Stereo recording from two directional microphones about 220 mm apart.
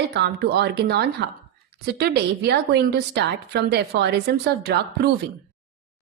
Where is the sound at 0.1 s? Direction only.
50° right (ahead or behind).